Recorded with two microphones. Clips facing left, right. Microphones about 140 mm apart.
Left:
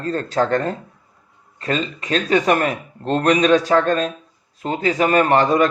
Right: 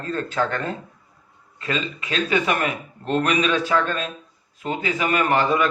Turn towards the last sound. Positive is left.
turn(degrees=40)  # may be behind; listen again after turning